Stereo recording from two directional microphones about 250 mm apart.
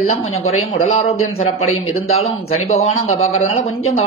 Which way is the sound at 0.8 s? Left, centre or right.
Left.